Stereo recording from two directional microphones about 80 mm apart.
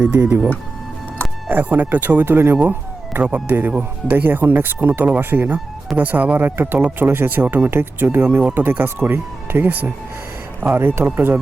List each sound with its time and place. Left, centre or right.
0.2 s speech: right
1.5 s speech: right